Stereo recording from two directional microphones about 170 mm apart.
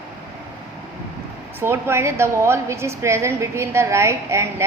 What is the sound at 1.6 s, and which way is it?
A woman's voice, 15° right (ahead or behind).